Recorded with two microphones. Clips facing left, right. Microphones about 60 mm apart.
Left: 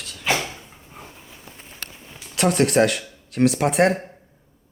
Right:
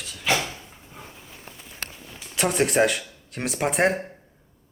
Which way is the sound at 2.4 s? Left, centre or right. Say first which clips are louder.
Left 3 dB; centre.